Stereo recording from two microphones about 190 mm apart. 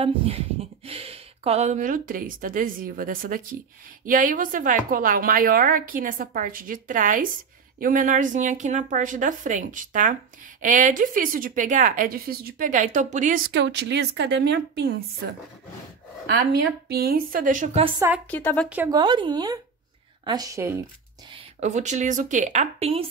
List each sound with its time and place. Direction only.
0.0 s a woman's voice: 30° right (ahead or behind)
13.5 s a woman's voice: 65° right (ahead or behind)
16.8 s a woman's voice: 55° right (ahead or behind)
17.8 s speech: 20° right (ahead or behind)
18.3 s speech: 10° left (ahead or behind)
18.9 s speech: 25° right (ahead or behind)
21.3 s a woman's voice: 30° right (ahead or behind)